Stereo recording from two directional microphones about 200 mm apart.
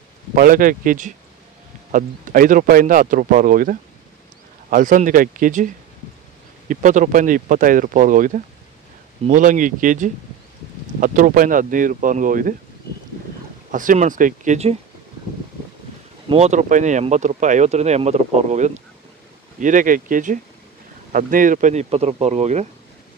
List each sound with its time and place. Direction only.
0.4 s a man's voice: 45° right (ahead or behind)
6.7 s speech: 40° right (ahead or behind)
13.7 s speech: 40° right (ahead or behind)
16.3 s speech: 35° right (ahead or behind)